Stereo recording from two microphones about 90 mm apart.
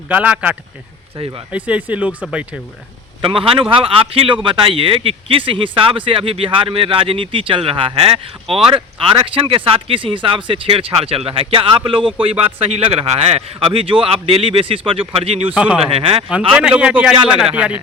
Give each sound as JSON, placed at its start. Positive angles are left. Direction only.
{"t": 0.1, "sound": "speech", "side_deg": -15}
{"t": 1.1, "sound": "speech", "side_deg": -80}
{"t": 1.5, "sound": "speech", "side_deg": -15}
{"t": 3.2, "sound": "speech", "side_deg": -80}
{"t": 15.5, "sound": "speech", "side_deg": -10}
{"t": 15.9, "sound": "speech", "side_deg": -90}
{"t": 16.5, "sound": "speech", "side_deg": -10}